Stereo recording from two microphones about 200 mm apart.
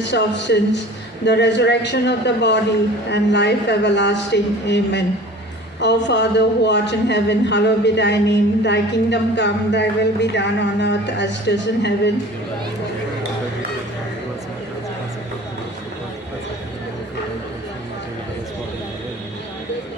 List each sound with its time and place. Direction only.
0.0 s speech: 60° left (ahead or behind)